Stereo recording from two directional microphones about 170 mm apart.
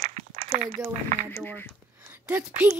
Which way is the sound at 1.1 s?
45° right (ahead or behind).